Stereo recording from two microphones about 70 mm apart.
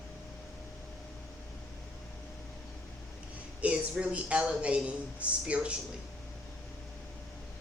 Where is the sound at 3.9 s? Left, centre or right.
Centre.